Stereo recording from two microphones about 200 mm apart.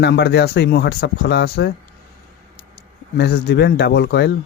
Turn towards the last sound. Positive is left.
turn(degrees=55)  # may be behind; listen again after turning